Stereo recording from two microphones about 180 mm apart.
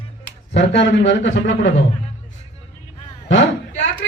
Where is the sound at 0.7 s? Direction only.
75° left (ahead or behind).